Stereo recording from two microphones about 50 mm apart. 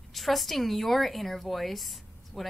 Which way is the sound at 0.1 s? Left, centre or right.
Centre.